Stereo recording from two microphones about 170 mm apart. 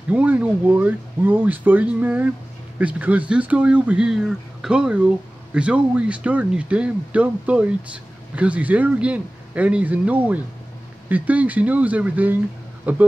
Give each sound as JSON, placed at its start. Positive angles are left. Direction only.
{"t": 0.1, "sound": "speech", "side_deg": -10}